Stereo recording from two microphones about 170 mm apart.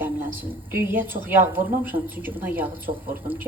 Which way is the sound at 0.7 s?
10° right (ahead or behind).